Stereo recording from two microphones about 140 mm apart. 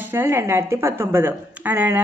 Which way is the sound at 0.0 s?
15° right (ahead or behind).